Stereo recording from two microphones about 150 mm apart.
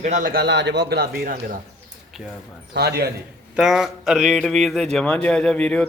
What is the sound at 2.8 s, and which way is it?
Speech, 90° right.